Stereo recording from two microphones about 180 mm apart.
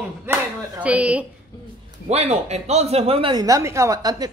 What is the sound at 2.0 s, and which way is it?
Speech, 35° right (ahead or behind).